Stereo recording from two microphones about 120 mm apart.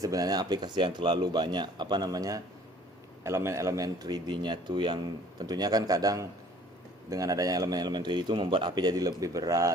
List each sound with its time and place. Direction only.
0.0 s a man's voice: 30° right (ahead or behind)